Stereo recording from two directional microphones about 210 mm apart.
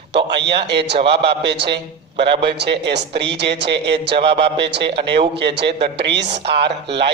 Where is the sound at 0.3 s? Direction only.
55° right (ahead or behind).